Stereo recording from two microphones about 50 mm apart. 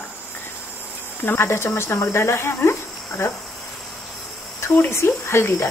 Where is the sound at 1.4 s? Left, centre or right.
Left.